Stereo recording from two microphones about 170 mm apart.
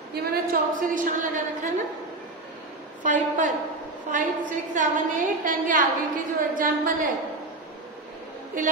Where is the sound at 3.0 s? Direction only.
50° right (ahead or behind).